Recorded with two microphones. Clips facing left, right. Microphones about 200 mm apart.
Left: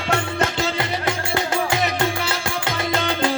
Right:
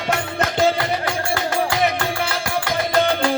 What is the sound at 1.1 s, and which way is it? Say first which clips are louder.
Music: even; 20° left (ahead or behind).